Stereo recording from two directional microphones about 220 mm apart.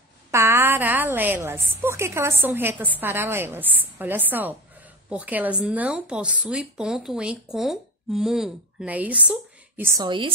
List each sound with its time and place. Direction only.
0.3 s a woman's voice: 10° right (ahead or behind)
10.0 s a woman's voice: 20° right (ahead or behind)